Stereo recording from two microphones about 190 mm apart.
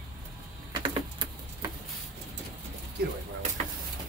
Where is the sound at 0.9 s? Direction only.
25° right (ahead or behind).